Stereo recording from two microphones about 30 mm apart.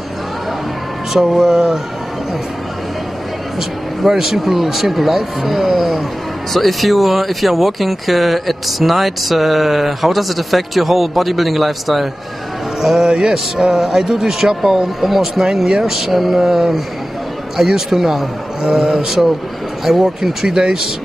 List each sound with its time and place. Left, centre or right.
1.3 s music: right
3.5 s speech: centre
13.0 s music: right
13.7 s speech: centre
15.0 s speech: centre
15.4 s music: right
15.8 s speech: centre
18.7 s music: centre
19.9 s speech: centre
20.4 s music: right